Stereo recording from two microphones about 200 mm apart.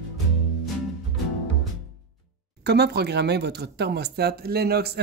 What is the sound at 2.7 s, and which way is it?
Speech, 55° right (ahead or behind).